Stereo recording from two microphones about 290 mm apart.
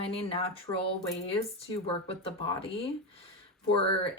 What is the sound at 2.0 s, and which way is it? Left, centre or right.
Speech, centre.